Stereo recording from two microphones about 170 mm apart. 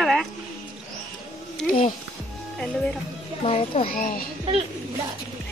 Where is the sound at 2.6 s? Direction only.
5° left (ahead or behind).